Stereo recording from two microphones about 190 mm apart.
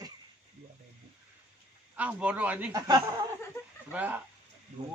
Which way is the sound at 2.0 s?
5° right (ahead or behind).